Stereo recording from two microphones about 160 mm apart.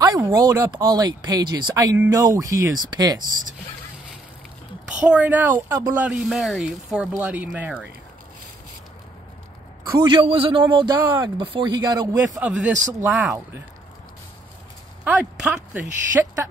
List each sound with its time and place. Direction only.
0.0 s speech: 25° right (ahead or behind)
5.0 s speech: 10° right (ahead or behind)
9.9 s a man's voice: 35° right (ahead or behind)
11.0 s speech: 15° right (ahead or behind)
11.3 s speech: 30° right (ahead or behind)
12.4 s speech: 5° right (ahead or behind)
15.0 s speech: 5° right (ahead or behind)